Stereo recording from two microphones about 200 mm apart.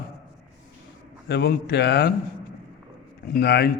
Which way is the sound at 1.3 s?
55° left (ahead or behind).